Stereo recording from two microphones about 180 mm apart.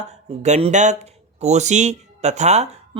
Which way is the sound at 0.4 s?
40° right (ahead or behind).